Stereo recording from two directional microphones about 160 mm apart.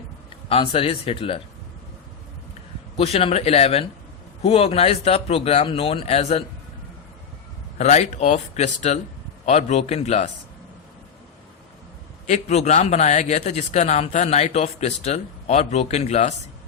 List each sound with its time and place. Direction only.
0.4 s speech: 35° left (ahead or behind)
3.0 s speech: 40° left (ahead or behind)
7.8 s a man's voice: 45° left (ahead or behind)
12.2 s a man's voice: 45° left (ahead or behind)